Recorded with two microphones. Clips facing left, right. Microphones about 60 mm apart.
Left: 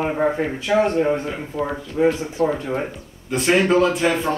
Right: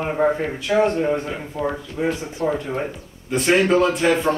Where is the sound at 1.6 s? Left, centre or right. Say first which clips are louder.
Left 4 dB; centre.